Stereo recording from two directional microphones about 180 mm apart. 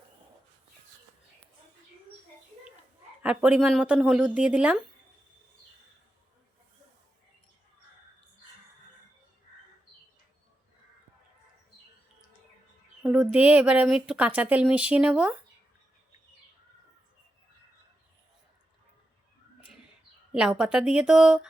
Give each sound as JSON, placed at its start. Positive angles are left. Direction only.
{"t": 3.2, "sound": "speech", "side_deg": -5}
{"t": 13.0, "sound": "speech", "side_deg": -5}
{"t": 20.3, "sound": "a woman's voice", "side_deg": -5}